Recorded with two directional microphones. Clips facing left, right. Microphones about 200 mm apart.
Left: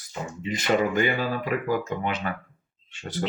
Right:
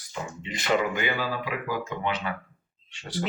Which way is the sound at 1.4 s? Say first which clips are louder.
Left 5 dB; 45° left (ahead or behind).